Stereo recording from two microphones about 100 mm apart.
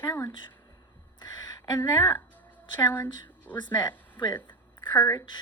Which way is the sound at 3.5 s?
45° left (ahead or behind).